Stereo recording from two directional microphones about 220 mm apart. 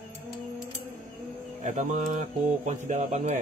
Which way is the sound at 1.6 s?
35° right (ahead or behind).